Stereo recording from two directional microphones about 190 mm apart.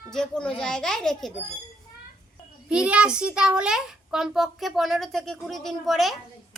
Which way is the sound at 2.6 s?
5° right (ahead or behind).